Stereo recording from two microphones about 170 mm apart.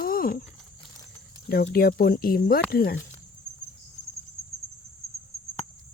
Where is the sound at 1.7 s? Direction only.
60° left (ahead or behind).